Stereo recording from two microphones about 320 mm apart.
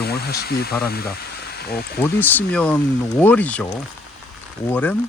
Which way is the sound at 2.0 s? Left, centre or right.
Centre.